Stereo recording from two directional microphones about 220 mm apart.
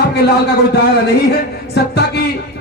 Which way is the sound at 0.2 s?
45° left (ahead or behind).